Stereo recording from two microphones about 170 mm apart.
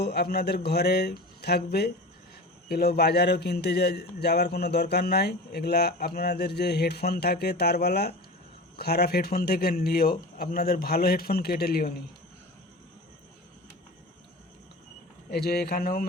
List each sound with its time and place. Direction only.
0.0 s a man's voice: 70° left (ahead or behind)
15.3 s a man's voice: 70° left (ahead or behind)